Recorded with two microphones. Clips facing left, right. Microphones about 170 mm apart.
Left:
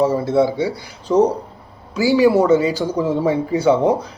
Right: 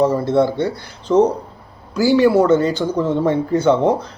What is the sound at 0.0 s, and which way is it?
Speech, centre (ahead or behind).